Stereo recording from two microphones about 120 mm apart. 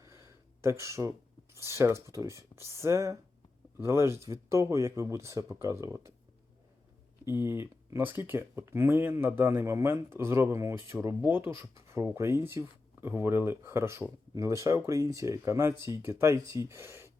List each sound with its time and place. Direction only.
0.0 s a sound: 25° right (ahead or behind)
1.6 s speech: 20° right (ahead or behind)
7.3 s speech: 20° right (ahead or behind)